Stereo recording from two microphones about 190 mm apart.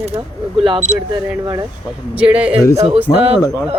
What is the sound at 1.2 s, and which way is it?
Speech, 20° right (ahead or behind).